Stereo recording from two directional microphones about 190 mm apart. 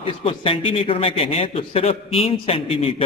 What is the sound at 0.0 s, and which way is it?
A man's voice, 30° left (ahead or behind).